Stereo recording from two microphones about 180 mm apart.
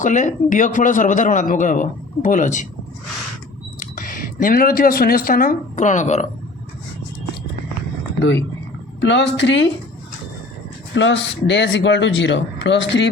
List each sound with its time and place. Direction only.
0.0 s speech: 45° left (ahead or behind)
3.8 s speech: 50° left (ahead or behind)
8.2 s speech: 85° left
10.9 s speech: 90° left